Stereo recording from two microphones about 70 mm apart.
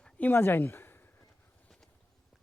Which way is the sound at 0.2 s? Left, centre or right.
Left.